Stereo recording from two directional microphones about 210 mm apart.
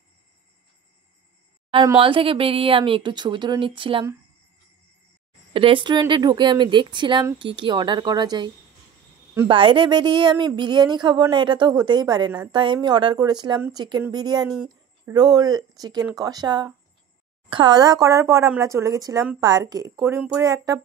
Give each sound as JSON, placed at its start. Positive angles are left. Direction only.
{"t": 2.0, "sound": "a woman's voice", "side_deg": -25}
{"t": 5.5, "sound": "a woman's voice", "side_deg": -25}